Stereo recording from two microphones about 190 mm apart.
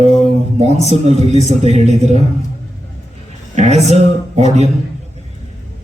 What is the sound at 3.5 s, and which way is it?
Speech, 35° right (ahead or behind).